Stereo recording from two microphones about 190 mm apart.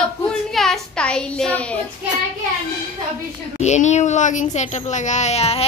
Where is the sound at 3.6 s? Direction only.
40° left (ahead or behind).